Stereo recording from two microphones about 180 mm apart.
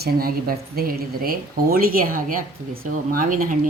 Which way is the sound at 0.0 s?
55° right (ahead or behind).